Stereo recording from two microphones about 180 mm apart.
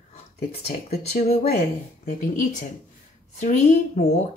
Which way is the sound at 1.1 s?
40° left (ahead or behind).